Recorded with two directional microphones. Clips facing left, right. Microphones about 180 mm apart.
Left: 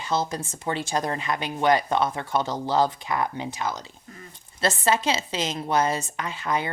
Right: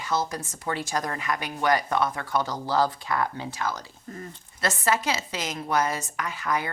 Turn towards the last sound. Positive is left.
turn(degrees=25)  # may be behind; listen again after turning